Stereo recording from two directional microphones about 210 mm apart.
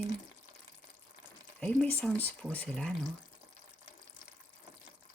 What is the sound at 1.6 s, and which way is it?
Speech, 5° left (ahead or behind).